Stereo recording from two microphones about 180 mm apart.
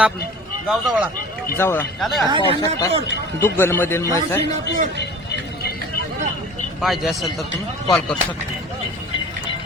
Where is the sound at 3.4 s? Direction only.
15° left (ahead or behind).